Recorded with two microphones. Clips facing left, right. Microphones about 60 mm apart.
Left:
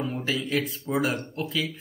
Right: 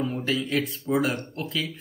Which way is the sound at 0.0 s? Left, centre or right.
Centre.